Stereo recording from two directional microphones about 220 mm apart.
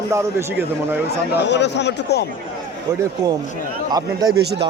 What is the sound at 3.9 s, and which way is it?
Speech, 15° right (ahead or behind).